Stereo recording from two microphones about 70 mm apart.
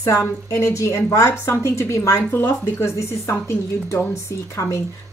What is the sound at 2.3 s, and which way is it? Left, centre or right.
A woman's voice, left.